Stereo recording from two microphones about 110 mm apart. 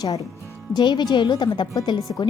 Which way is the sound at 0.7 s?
40° left (ahead or behind).